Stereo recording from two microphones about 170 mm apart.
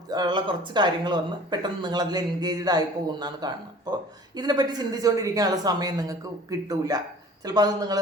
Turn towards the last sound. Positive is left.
turn(degrees=-25)  # may be behind; listen again after turning